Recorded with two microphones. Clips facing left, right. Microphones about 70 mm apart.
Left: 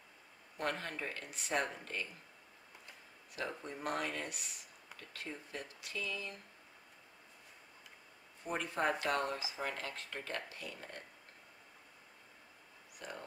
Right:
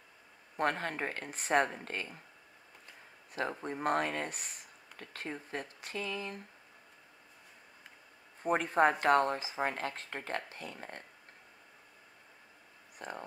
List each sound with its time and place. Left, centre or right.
0.6 s speech: right
3.3 s speech: right
8.4 s speech: right
13.0 s speech: right